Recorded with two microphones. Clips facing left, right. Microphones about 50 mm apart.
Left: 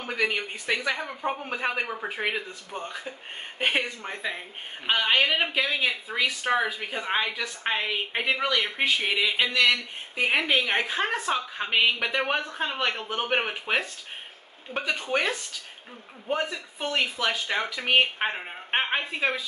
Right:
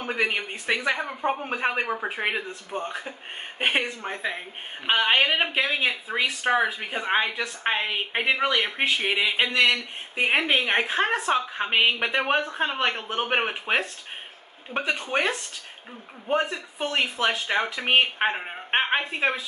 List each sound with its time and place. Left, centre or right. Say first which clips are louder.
0.0 s speech: right 1 dB; centre
15.0 s speech: even; centre
16.9 s speech: right 2 dB; right